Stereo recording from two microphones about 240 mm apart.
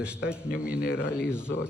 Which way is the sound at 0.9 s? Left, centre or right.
Centre.